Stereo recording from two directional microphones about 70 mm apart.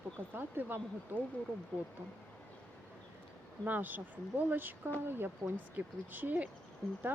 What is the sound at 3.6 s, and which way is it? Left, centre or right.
Speech, right.